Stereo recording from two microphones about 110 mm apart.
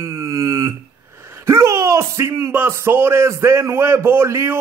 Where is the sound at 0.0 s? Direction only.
30° right (ahead or behind).